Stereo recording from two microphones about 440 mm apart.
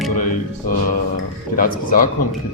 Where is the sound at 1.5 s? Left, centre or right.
Centre.